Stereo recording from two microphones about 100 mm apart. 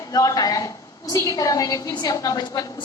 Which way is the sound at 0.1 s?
40° left (ahead or behind).